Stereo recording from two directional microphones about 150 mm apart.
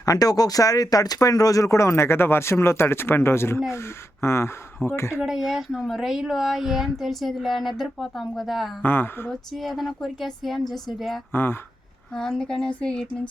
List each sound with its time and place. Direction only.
0.0 s speech: 25° left (ahead or behind)
5.2 s a child's voice: centre (ahead or behind)
8.8 s a woman's voice: 15° left (ahead or behind)
9.3 s a child's voice: centre (ahead or behind)
11.3 s a woman's voice: 15° left (ahead or behind)
12.1 s a child's voice: 5° left (ahead or behind)